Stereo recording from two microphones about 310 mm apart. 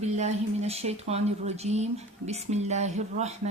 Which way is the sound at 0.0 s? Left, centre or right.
Right.